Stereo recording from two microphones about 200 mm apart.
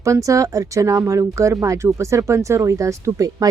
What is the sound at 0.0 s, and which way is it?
Speech, 15° right (ahead or behind).